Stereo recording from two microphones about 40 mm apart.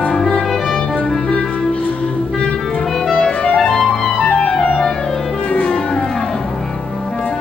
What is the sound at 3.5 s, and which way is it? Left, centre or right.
Clarinet, centre.